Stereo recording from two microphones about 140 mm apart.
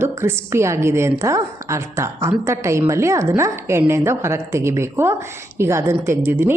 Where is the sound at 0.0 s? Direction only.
15° right (ahead or behind).